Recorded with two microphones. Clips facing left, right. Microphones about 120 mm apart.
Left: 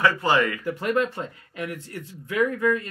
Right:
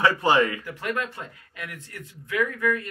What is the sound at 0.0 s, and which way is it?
Speech, 20° right (ahead or behind).